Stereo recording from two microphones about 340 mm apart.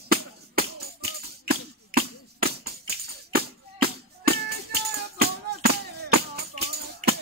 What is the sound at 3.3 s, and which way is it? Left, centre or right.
Music, right.